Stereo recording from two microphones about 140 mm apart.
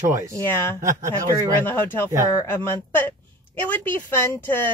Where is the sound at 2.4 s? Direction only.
15° left (ahead or behind).